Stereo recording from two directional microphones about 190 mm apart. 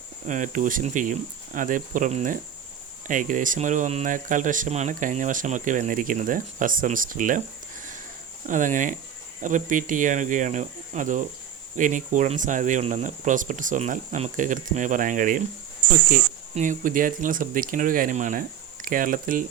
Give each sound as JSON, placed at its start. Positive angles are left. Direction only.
{"t": 0.3, "sound": "speech", "side_deg": -40}
{"t": 8.4, "sound": "speech", "side_deg": -40}